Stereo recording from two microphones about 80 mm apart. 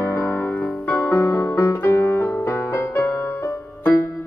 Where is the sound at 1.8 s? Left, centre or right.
Left.